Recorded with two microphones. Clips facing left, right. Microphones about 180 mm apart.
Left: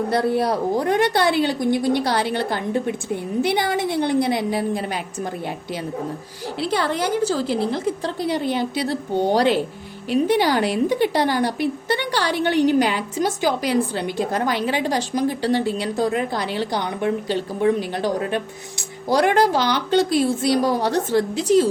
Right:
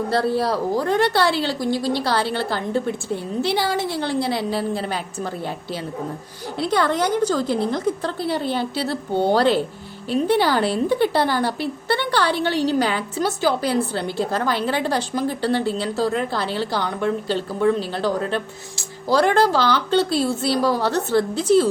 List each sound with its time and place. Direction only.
0.1 s speech: 20° left (ahead or behind)
6.7 s a woman's voice: 10° left (ahead or behind)
13.9 s a woman's voice: 15° left (ahead or behind)